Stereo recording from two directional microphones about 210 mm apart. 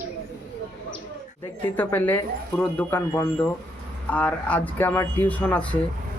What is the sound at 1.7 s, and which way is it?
Speech, 10° left (ahead or behind).